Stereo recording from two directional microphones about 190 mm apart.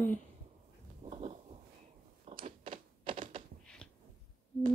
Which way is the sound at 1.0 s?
35° right (ahead or behind).